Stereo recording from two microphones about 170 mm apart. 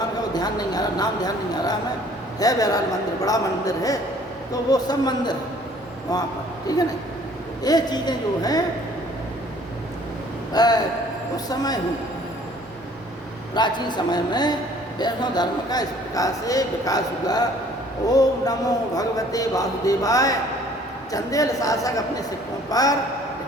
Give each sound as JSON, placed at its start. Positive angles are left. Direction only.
{"t": 0.3, "sound": "a man's voice", "side_deg": 25}
{"t": 6.7, "sound": "a man's voice", "side_deg": 20}
{"t": 10.5, "sound": "a man's voice", "side_deg": 25}
{"t": 13.5, "sound": "a man's voice", "side_deg": 25}